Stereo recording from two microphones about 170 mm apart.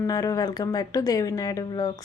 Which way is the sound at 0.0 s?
20° left (ahead or behind).